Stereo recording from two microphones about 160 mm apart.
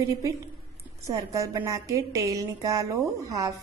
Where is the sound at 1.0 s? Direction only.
20° right (ahead or behind).